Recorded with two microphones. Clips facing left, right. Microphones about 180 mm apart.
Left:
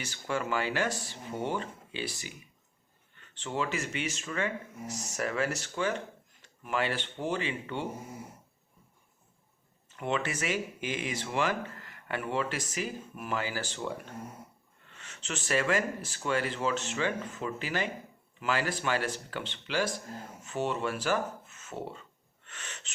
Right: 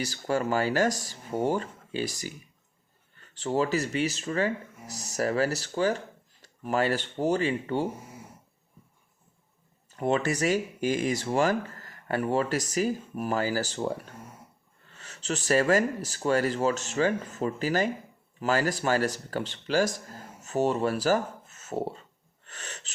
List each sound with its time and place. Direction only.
0.0 s speech: 40° right (ahead or behind)
9.9 s speech: 40° right (ahead or behind)
22.4 s a sound: 35° right (ahead or behind)